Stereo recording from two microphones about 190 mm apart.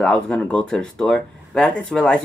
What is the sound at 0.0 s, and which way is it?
Speech, 5° left (ahead or behind).